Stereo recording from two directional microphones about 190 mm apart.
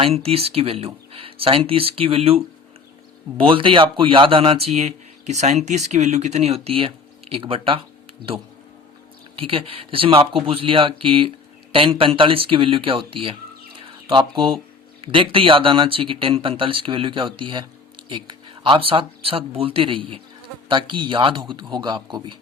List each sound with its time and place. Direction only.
0.0 s a man's voice: 30° right (ahead or behind)
3.4 s a man's voice: 25° right (ahead or behind)
9.4 s speech: 30° right (ahead or behind)
13.7 s bird: 25° right (ahead or behind)
15.0 s speech: 30° right (ahead or behind)